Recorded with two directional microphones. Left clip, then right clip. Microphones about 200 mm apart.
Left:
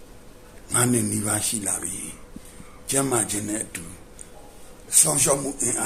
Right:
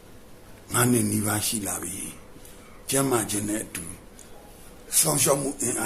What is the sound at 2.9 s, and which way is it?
Speech, centre (ahead or behind).